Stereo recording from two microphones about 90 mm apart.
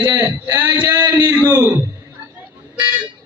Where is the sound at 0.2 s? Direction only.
25° right (ahead or behind).